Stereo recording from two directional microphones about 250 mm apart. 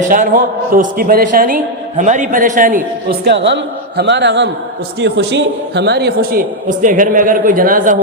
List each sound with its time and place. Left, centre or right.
0.0 s a woman's voice: right
3.2 s a man's voice: right